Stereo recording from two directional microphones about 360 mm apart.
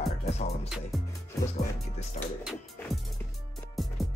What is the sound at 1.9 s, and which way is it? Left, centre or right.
Speech, centre.